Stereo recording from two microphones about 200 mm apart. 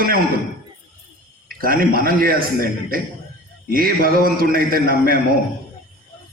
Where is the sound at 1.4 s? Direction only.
45° right (ahead or behind).